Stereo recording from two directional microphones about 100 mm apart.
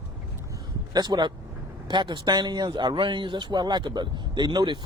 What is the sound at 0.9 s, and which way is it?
Speech, 45° right (ahead or behind).